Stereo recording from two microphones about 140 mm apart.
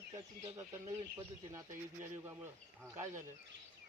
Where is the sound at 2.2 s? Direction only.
15° right (ahead or behind).